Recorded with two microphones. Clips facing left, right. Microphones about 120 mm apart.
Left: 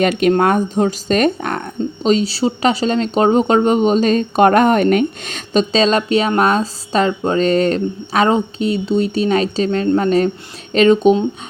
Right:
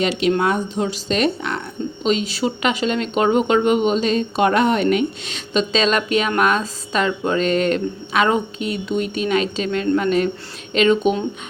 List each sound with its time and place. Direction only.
0.0 s speech: 50° left (ahead or behind)
5.7 s speech: 30° left (ahead or behind)